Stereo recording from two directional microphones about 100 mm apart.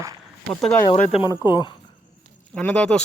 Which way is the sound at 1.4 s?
50° left (ahead or behind).